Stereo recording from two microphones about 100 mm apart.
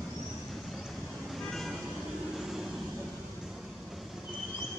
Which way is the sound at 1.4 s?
5° left (ahead or behind).